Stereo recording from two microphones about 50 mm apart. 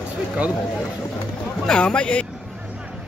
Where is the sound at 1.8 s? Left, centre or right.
Left.